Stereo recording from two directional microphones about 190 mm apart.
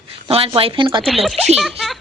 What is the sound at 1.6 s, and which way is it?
Speech, centre (ahead or behind).